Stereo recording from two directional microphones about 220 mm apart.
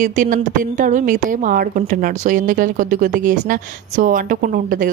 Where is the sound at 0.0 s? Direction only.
35° right (ahead or behind).